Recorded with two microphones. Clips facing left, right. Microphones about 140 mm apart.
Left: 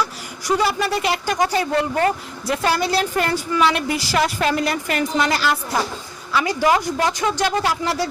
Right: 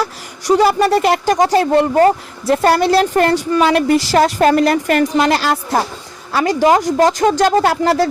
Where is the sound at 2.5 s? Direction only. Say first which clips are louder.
Right 8 dB; 45° right (ahead or behind).